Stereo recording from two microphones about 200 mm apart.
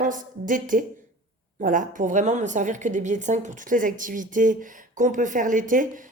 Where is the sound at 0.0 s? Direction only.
40° right (ahead or behind).